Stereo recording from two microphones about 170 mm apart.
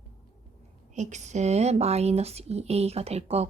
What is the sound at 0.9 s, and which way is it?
Speech, 45° right (ahead or behind).